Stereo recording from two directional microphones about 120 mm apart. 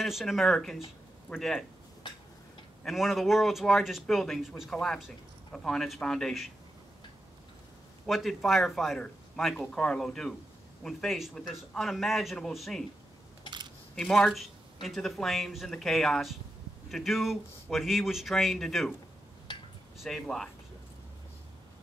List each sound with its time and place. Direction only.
0.0 s speech: centre (ahead or behind)
2.8 s speech: centre (ahead or behind)
8.1 s speech: centre (ahead or behind)
13.9 s speech: 5° left (ahead or behind)
19.5 s a sound: 40° left (ahead or behind)
20.0 s speech: centre (ahead or behind)